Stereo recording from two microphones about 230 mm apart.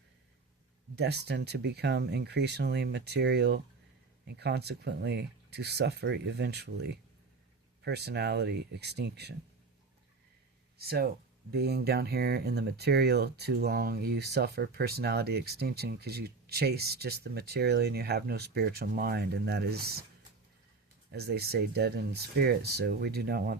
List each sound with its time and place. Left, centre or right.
0.9 s speech: right
10.8 s speech: right
21.1 s speech: right